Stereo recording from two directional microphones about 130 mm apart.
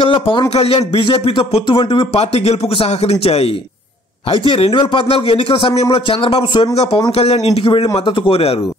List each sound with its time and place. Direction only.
0.0 s speech: 40° left (ahead or behind)